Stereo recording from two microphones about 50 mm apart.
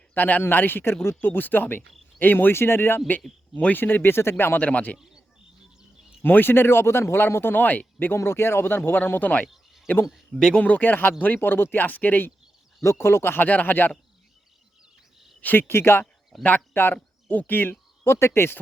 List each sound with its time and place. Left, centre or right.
0.1 s speech: left
4.5 s speech: left
6.2 s speech: left
8.1 s speech: left
9.5 s a sound: centre
10.3 s speech: centre
10.6 s speech: left
12.8 s speech: left
13.4 s speech: left
15.5 s speech: left
16.4 s speech: left
16.7 s speech: left
17.2 s speech: left